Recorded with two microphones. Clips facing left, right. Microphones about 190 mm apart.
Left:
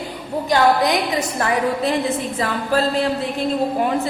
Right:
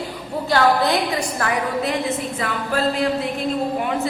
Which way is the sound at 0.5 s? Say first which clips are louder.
Left 1 dB; 15° left (ahead or behind).